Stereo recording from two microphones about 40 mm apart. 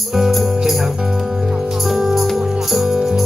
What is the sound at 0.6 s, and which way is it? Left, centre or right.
Music, centre.